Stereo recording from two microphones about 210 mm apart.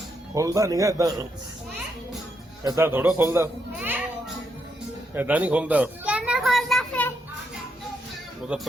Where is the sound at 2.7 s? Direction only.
10° right (ahead or behind).